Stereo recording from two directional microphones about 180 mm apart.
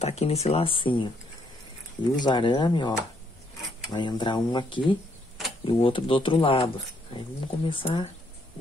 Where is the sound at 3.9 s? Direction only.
25° left (ahead or behind).